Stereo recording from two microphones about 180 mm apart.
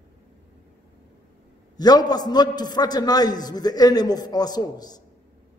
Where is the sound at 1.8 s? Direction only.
20° left (ahead or behind).